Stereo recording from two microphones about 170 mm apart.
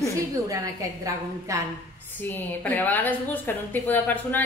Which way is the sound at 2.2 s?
10° left (ahead or behind).